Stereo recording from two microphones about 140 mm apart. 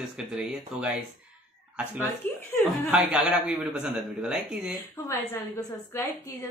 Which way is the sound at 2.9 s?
5° right (ahead or behind).